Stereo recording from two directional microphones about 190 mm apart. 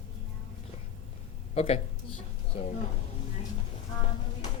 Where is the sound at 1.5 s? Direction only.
35° left (ahead or behind).